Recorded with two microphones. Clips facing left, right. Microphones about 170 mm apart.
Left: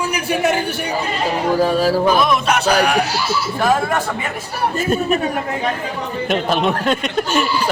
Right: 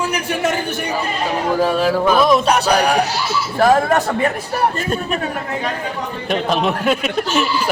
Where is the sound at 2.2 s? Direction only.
35° right (ahead or behind).